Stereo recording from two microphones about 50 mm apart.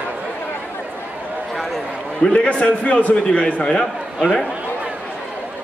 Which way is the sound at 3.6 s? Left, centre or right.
Centre.